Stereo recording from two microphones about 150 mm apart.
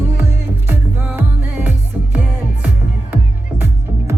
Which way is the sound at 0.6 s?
10° right (ahead or behind).